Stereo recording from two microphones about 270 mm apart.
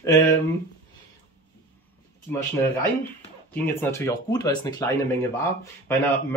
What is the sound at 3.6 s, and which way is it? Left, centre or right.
Speech, centre.